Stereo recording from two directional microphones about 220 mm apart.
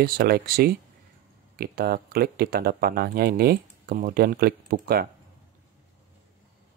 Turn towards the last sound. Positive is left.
turn(degrees=-45)  # may be behind; listen again after turning